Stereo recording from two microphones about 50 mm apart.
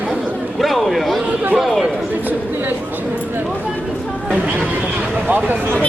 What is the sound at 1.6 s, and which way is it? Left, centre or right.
Chatter, centre.